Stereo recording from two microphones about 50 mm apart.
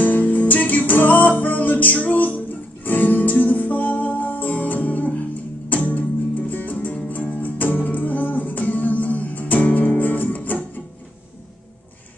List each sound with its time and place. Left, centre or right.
0.0 s music: left